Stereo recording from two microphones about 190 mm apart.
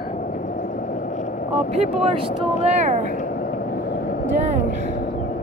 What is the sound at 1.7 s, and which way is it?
Speech, 30° right (ahead or behind).